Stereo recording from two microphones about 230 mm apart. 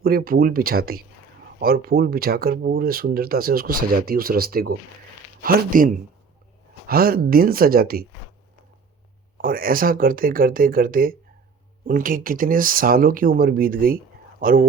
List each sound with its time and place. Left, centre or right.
0.0 s speech: right
9.4 s speech: right